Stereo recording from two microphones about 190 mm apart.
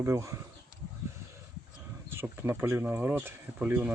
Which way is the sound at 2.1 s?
15° right (ahead or behind).